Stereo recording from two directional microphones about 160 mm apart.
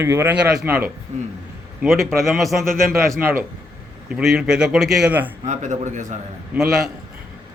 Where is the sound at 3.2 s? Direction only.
65° right (ahead or behind).